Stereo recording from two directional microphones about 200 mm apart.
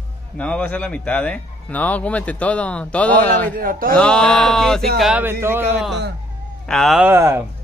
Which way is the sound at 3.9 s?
5° left (ahead or behind).